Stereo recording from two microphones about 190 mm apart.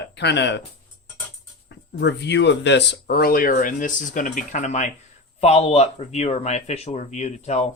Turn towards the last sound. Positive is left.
turn(degrees=35)  # may be behind; listen again after turning